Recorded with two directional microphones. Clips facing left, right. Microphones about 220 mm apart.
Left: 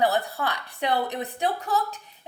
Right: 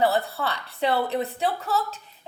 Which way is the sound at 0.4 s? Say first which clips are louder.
Right 2 dB; 15° left (ahead or behind).